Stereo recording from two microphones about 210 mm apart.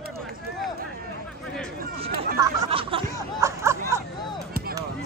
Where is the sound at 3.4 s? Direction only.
15° right (ahead or behind).